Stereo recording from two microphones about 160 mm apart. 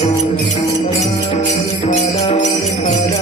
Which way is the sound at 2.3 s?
50° left (ahead or behind).